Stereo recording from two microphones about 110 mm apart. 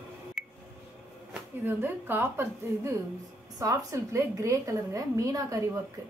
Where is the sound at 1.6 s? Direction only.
20° right (ahead or behind).